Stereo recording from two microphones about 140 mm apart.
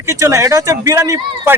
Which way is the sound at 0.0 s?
20° right (ahead or behind).